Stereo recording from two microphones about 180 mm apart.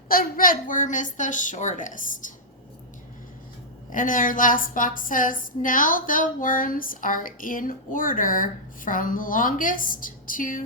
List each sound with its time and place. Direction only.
0.1 s a woman's voice: 55° left (ahead or behind)
3.9 s a woman's voice: 50° left (ahead or behind)